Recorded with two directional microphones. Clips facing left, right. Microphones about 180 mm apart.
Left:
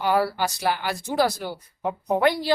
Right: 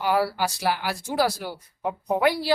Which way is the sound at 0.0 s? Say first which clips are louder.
Left 1 dB; 10° right (ahead or behind).